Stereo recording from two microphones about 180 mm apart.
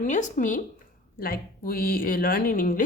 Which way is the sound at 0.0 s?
45° left (ahead or behind).